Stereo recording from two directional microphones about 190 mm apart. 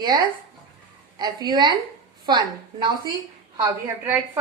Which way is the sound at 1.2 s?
20° right (ahead or behind).